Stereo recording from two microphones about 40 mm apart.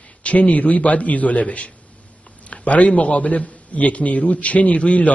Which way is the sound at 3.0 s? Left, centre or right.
Left.